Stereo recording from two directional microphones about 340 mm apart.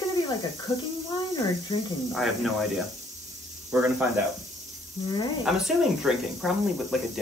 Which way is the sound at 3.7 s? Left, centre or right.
Centre.